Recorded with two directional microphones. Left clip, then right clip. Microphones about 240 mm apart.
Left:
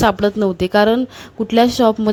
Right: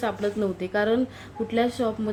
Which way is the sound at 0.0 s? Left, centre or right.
Left.